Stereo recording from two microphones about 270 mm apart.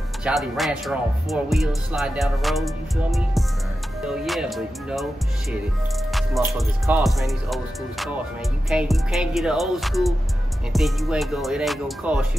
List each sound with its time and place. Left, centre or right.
0.2 s speech: centre
6.4 s speech: centre